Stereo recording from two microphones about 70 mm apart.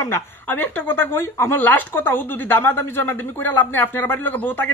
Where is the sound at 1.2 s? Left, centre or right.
Left.